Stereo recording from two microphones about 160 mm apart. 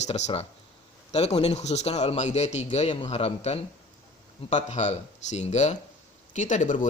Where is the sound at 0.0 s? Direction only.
45° left (ahead or behind).